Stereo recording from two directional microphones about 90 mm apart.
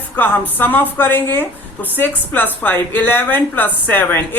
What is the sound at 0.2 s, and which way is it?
Speech, 20° left (ahead or behind).